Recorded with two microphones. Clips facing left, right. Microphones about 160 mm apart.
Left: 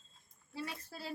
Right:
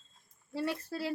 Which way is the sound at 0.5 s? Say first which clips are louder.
Right 9 dB; 70° right (ahead or behind).